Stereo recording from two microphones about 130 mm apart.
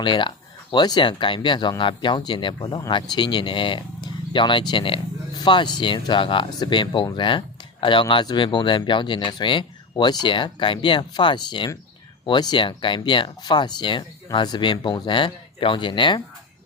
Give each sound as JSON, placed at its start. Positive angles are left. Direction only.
{"t": 0.0, "sound": "speech", "side_deg": 40}